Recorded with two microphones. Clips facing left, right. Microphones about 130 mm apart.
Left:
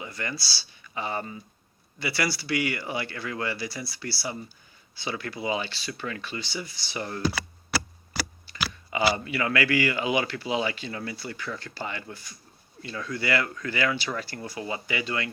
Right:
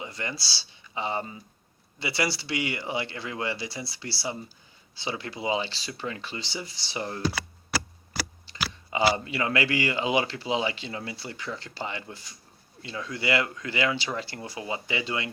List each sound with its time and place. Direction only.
0.0 s speech: 25° right (ahead or behind)
8.4 s speech: 25° right (ahead or behind)